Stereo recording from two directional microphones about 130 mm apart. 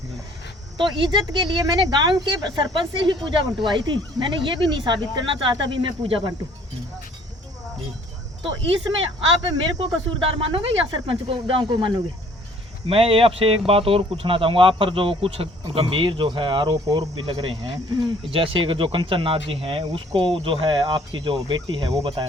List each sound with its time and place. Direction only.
0.8 s a man's voice: 40° right (ahead or behind)
10.2 s a man's voice: 40° right (ahead or behind)